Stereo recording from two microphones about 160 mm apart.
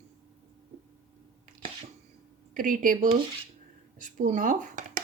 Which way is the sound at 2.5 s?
55° right (ahead or behind).